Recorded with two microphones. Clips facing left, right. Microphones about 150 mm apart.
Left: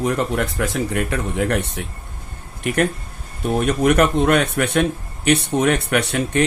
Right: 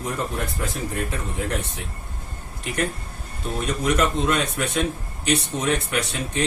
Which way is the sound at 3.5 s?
60° left (ahead or behind).